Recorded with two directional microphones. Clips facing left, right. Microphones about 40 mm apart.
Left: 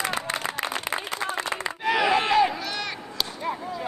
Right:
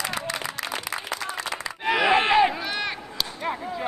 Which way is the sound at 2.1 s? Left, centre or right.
Right.